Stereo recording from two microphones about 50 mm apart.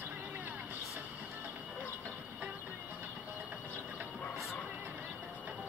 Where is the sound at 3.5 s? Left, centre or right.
Right.